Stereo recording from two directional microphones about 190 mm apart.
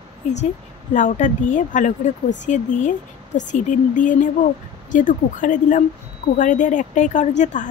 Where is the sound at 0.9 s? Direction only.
40° left (ahead or behind).